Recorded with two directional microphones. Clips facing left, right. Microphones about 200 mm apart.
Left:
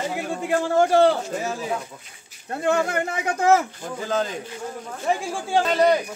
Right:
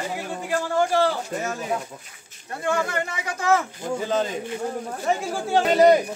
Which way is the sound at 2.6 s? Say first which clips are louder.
Left 3 dB; 55° left (ahead or behind).